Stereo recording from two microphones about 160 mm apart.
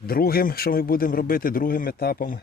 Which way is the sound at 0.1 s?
70° left (ahead or behind).